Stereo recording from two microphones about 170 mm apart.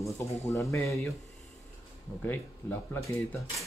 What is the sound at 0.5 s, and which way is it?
Speech, 15° left (ahead or behind).